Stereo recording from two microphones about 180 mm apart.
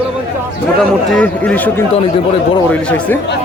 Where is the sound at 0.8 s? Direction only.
5° left (ahead or behind).